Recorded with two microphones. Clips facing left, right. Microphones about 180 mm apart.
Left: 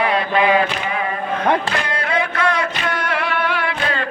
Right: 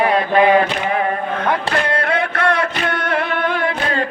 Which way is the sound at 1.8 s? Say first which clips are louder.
Right 3 dB; 60° right (ahead or behind).